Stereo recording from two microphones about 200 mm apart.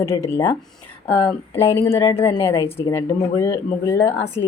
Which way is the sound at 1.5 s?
15° left (ahead or behind).